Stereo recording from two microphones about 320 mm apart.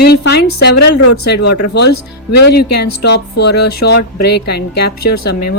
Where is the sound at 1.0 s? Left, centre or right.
Left.